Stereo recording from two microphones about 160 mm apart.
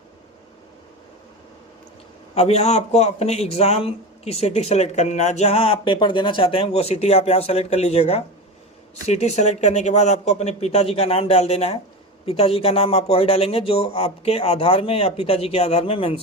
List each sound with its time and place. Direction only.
2.3 s a man's voice: 40° left (ahead or behind)